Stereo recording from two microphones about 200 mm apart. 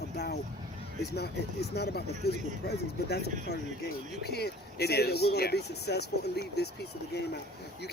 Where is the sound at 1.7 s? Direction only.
55° left (ahead or behind).